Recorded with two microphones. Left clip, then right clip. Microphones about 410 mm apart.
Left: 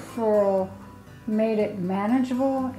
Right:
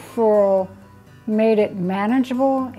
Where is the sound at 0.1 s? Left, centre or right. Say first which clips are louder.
Right 6 dB; right.